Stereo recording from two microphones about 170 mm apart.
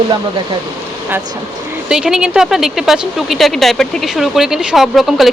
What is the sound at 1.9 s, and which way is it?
Speech, 5° right (ahead or behind).